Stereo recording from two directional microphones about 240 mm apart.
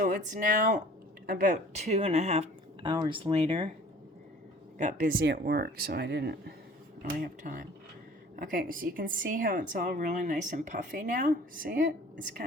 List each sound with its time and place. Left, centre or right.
0.0 s a woman's voice: right
4.8 s a woman's voice: right